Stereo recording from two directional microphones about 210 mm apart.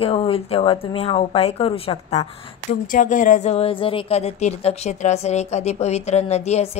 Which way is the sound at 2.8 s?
40° left (ahead or behind).